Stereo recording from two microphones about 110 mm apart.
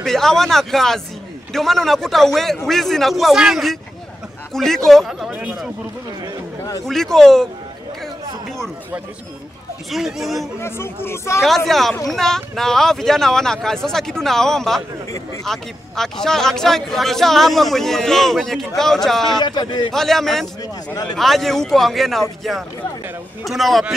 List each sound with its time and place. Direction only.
0.0 s speech: 5° left (ahead or behind)
6.9 s speech: 5° left (ahead or behind)
9.8 s speech: centre (ahead or behind)
10.6 s speech: 20° left (ahead or behind)
11.4 s speech: centre (ahead or behind)
19.4 s a man's voice: 40° left (ahead or behind)
19.9 s speech: 5° left (ahead or behind)
20.9 s a man's voice: 40° left (ahead or behind)
21.2 s speech: centre (ahead or behind)